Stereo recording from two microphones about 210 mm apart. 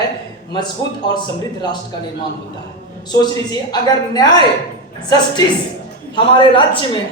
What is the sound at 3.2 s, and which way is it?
Speech, 20° left (ahead or behind).